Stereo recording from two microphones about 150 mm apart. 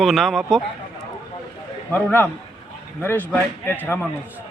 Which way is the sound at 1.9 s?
15° left (ahead or behind).